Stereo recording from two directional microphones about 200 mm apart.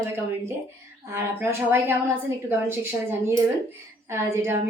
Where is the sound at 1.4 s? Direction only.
10° right (ahead or behind).